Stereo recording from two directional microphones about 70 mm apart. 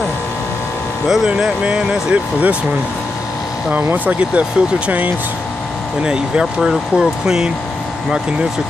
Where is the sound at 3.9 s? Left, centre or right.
Right.